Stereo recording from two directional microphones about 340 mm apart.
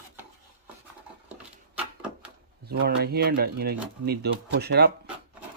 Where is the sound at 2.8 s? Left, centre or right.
Right.